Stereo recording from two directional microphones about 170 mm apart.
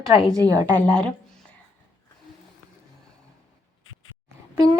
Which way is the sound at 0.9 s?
5° left (ahead or behind).